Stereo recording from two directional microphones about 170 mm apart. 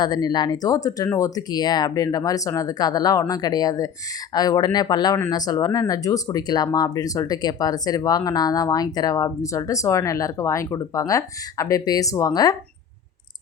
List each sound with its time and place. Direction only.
0.0 s speech: 25° left (ahead or behind)